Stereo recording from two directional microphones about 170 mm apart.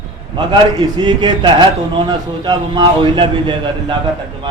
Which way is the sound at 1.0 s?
25° right (ahead or behind).